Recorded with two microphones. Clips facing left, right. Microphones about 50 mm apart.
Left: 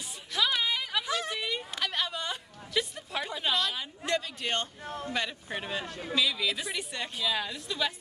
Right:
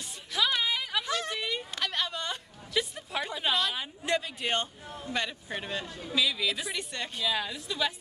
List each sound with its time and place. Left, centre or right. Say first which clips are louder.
0.3 s a sound: even; centre
4.8 s speech: left 4 dB; left
5.1 s a woman's voice: right 2 dB; centre